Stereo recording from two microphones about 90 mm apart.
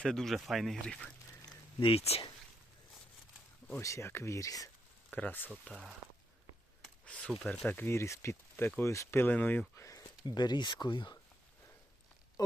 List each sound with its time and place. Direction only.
0.0 s speech: 5° left (ahead or behind)
1.8 s speech: 80° left
3.8 s speech: 35° left (ahead or behind)
5.1 s speech: 20° left (ahead or behind)
5.7 s speech: 5° right (ahead or behind)
7.0 s speech: 10° left (ahead or behind)
7.7 s speech: 25° left (ahead or behind)
10.3 s speech: 55° left (ahead or behind)
12.4 s speech: 50° left (ahead or behind)